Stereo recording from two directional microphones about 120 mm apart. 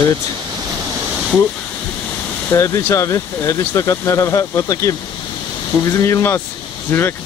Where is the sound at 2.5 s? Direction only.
25° left (ahead or behind).